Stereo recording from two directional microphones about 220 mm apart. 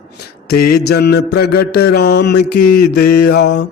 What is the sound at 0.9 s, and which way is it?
A man's voice, 45° left (ahead or behind).